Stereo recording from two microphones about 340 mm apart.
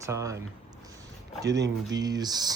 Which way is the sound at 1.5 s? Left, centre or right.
Right.